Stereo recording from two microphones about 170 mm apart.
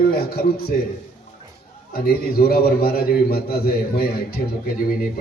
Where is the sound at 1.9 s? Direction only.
65° left (ahead or behind).